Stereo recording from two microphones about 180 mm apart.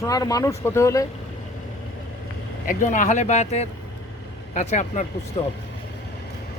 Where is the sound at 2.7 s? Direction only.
45° left (ahead or behind).